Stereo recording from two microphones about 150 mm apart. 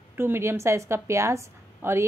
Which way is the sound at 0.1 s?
15° right (ahead or behind).